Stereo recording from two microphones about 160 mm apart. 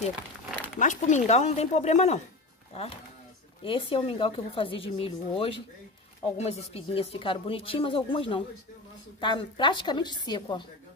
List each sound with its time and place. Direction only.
0.7 s speech: 50° left (ahead or behind)
3.6 s a woman's voice: 35° left (ahead or behind)